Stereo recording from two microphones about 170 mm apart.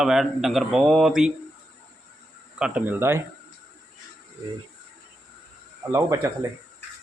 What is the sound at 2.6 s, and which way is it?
Speech, 10° right (ahead or behind).